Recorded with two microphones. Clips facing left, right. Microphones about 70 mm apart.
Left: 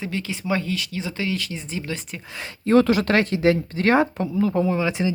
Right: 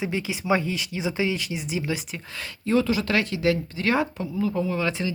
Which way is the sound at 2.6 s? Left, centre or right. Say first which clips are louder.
Left 5 dB; left.